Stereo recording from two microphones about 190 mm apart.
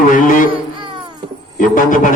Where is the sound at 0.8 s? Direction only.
25° right (ahead or behind).